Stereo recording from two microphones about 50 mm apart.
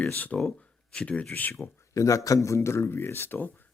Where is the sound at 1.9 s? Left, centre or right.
Left.